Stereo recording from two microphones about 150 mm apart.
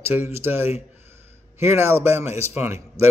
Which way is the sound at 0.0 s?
15° right (ahead or behind).